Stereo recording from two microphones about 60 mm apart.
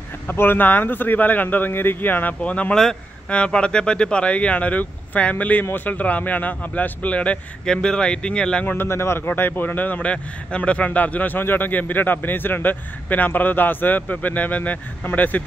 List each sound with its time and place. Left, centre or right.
0.3 s a man's voice: left
2.4 s a man's voice: left
2.7 s speech: centre
3.3 s a man's voice: centre
8.8 s a man's voice: left